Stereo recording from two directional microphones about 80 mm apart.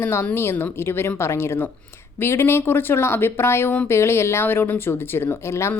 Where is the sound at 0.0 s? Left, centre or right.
Left.